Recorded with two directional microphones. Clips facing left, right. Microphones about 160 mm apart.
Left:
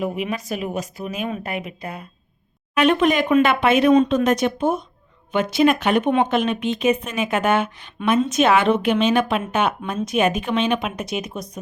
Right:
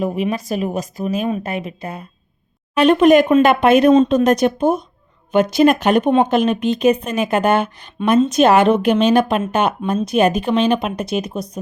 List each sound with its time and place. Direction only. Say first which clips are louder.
0.0 s speech: right 5 dB; 40° right (ahead or behind)
1.3 s speech: right 5 dB; 25° right (ahead or behind)
2.7 s speech: right 6 dB; 40° right (ahead or behind)